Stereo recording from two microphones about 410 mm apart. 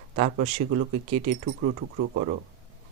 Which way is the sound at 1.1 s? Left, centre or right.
Right.